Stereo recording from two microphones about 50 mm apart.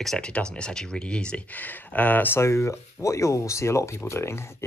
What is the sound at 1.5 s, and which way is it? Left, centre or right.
Speech, left.